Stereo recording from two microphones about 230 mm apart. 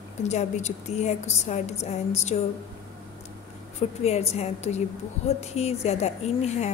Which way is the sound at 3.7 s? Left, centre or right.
Left.